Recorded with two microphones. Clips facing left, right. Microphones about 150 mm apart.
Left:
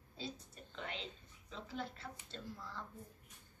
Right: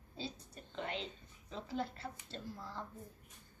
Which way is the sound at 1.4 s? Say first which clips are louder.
Right 5 dB; 40° right (ahead or behind).